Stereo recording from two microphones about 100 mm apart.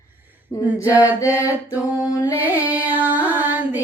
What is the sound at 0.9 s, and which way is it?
Mantra, 15° right (ahead or behind).